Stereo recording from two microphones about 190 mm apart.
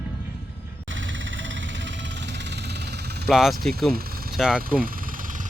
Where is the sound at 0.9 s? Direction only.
80° right; by 3.2 s 60° right (ahead or behind).